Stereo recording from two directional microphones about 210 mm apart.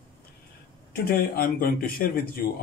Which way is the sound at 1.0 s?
45° left (ahead or behind).